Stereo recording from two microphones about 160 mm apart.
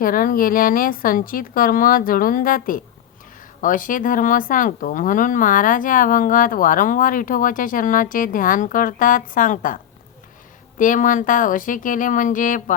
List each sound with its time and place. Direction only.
0.0 s speech: 60° left (ahead or behind)